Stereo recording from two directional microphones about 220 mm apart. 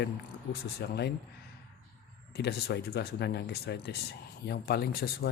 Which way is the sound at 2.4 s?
50° left (ahead or behind).